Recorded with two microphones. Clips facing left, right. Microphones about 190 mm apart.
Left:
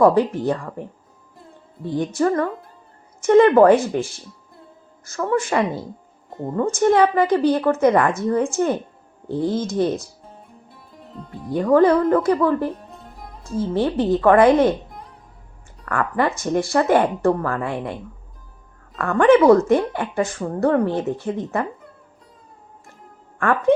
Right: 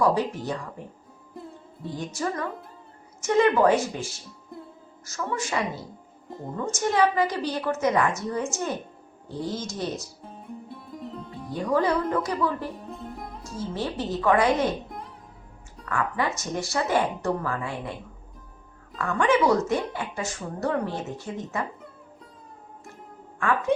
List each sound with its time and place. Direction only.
0.0 s a woman's voice: 55° left (ahead or behind)
2.0 s a woman's voice: 55° left (ahead or behind)
5.0 s a woman's voice: 55° left (ahead or behind)
10.7 s music: centre (ahead or behind)
11.5 s speech: 55° left (ahead or behind)
12.7 s music: centre (ahead or behind)
13.4 s a woman's voice: 55° left (ahead or behind)
14.8 s music: centre (ahead or behind)
15.9 s a woman's voice: 55° left (ahead or behind)
18.9 s a woman's voice: 55° left (ahead or behind)